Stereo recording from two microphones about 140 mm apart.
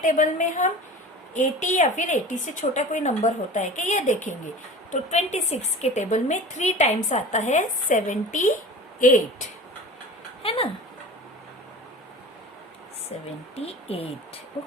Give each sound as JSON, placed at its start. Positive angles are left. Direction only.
{"t": 0.0, "sound": "a woman's voice", "side_deg": 65}
{"t": 10.4, "sound": "a sound", "side_deg": 40}
{"t": 13.6, "sound": "speech", "side_deg": 45}